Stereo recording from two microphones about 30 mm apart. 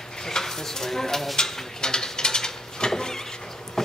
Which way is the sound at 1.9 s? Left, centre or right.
Left.